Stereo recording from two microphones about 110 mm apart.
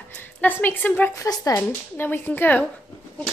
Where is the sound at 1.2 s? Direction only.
30° left (ahead or behind).